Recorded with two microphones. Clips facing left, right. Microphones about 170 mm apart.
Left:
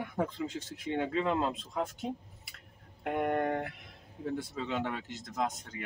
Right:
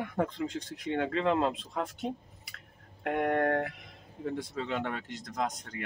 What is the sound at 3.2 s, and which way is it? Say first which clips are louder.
Speech: right 3 dB; 5° left (ahead or behind).